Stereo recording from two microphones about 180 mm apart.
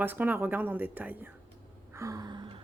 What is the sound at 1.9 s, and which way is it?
Gasp, 20° right (ahead or behind).